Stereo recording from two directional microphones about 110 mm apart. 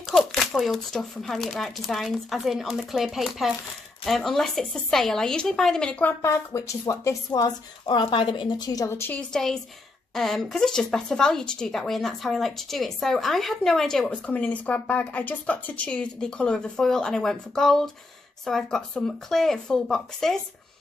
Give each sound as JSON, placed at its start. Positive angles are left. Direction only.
{"t": 0.1, "sound": "speech", "side_deg": 0}
{"t": 6.2, "sound": "a woman's voice", "side_deg": 30}
{"t": 7.8, "sound": "speech", "side_deg": 50}
{"t": 9.3, "sound": "speech", "side_deg": 5}